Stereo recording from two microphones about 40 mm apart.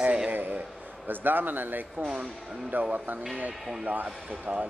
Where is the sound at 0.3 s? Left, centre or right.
Right.